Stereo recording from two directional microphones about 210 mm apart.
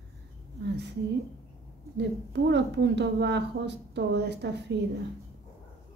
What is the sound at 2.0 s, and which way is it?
A woman's voice, 55° right (ahead or behind).